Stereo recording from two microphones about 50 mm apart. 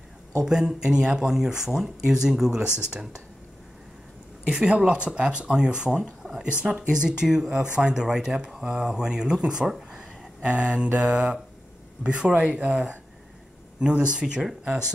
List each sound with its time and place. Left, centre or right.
0.5 s speech: centre
4.5 s speech: right
6.9 s speech: centre
10.4 s speech: right